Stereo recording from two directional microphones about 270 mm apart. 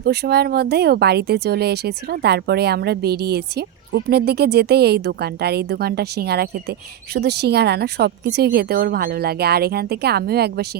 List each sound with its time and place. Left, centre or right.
0.0 s speech: right